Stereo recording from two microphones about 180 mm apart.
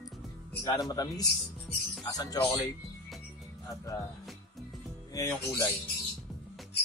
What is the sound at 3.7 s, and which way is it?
Speech, 15° left (ahead or behind).